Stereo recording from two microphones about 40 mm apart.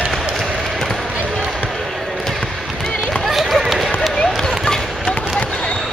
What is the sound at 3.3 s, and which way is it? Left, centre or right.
Run, centre.